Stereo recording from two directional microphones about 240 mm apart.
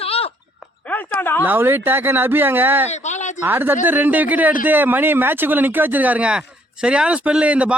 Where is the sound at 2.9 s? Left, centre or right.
Left.